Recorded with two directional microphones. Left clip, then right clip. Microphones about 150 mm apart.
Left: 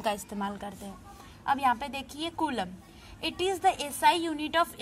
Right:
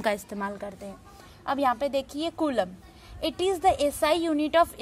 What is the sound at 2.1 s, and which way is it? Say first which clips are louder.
A woman's voice: right 5 dB; 40° right (ahead or behind).